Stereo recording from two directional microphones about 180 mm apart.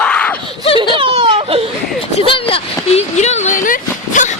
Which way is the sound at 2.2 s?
30° left (ahead or behind).